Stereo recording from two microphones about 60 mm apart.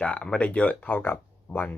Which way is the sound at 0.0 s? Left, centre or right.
Centre.